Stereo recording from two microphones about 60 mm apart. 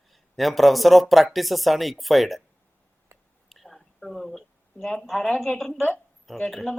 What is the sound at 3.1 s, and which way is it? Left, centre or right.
Whispering, right.